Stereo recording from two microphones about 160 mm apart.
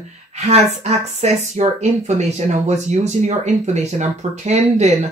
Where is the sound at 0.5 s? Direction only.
40° right (ahead or behind).